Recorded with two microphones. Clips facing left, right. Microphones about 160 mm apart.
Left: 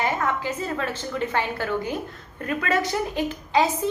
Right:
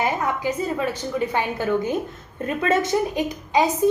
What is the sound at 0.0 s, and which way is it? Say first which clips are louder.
A woman's voice: right 2 dB; 15° right (ahead or behind).